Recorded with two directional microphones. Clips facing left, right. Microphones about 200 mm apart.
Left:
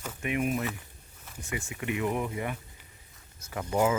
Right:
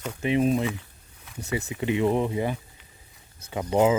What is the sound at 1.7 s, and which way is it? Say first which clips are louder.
Speech: right 7 dB; 25° right (ahead or behind).